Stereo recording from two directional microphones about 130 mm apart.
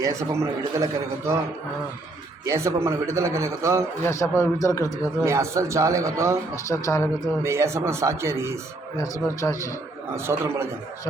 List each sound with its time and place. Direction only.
0.0 s a man's voice: 25° right (ahead or behind)
2.4 s a man's voice: 25° right (ahead or behind)
4.0 s speech: 20° left (ahead or behind)
5.2 s a man's voice: 20° right (ahead or behind)
6.7 s speech: 25° left (ahead or behind)
7.4 s a man's voice: 20° right (ahead or behind)
9.0 s speech: 25° left (ahead or behind)
10.2 s a man's voice: 20° right (ahead or behind)